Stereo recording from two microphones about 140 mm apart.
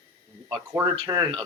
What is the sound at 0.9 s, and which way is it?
Speech, 35° right (ahead or behind).